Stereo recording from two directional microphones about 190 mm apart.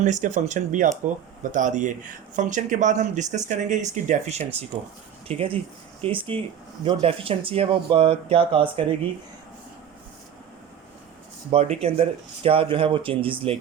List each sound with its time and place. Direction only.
0.0 s speech: 40° right (ahead or behind)
11.5 s speech: 30° right (ahead or behind)